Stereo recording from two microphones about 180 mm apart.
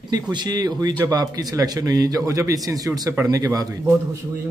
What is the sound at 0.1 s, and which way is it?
Speech, 25° right (ahead or behind).